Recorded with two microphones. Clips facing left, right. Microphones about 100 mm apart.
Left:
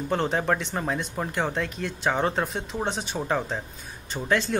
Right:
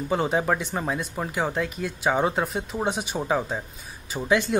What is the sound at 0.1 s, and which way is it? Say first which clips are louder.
Speech: right 1 dB; 10° right (ahead or behind).